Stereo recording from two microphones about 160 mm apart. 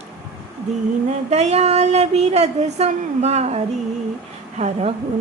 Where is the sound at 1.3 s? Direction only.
45° right (ahead or behind).